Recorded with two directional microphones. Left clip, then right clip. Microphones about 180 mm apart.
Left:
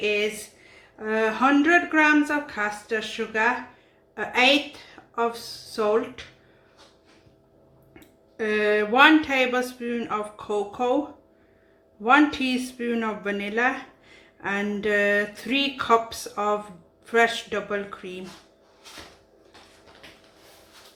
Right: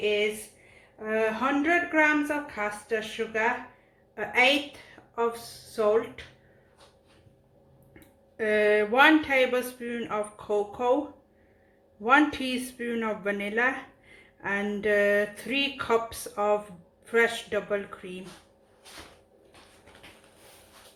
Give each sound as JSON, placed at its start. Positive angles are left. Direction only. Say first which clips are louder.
{"t": 0.0, "sound": "a sound", "louder": "left 2 dB", "side_deg": 20}
{"t": 0.9, "sound": "speech", "louder": "left 3 dB", "side_deg": 20}
{"t": 5.7, "sound": "speech", "louder": "left 1 dB", "side_deg": 20}
{"t": 8.4, "sound": "speech", "louder": "left 1 dB", "side_deg": 10}
{"t": 12.0, "sound": "speech", "louder": "left 3 dB", "side_deg": 15}